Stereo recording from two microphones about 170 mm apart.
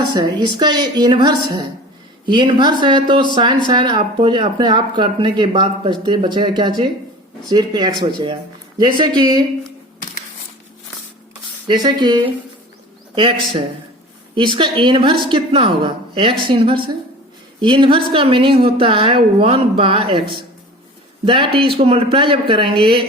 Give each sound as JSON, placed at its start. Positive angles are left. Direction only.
{"t": 0.0, "sound": "speech", "side_deg": -25}
{"t": 11.7, "sound": "a woman's voice", "side_deg": -25}